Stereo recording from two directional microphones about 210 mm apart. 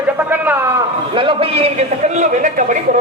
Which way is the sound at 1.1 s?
25° right (ahead or behind).